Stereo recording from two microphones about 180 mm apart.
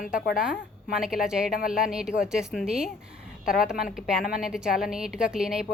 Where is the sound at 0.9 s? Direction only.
5° right (ahead or behind).